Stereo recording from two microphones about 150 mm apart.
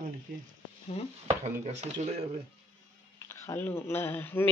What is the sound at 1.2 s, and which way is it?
Speech, 45° right (ahead or behind).